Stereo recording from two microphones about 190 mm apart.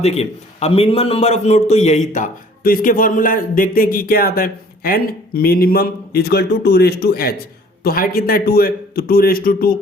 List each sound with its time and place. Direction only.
0.0 s a man's voice: 35° left (ahead or behind); by 9.7 s 50° left (ahead or behind)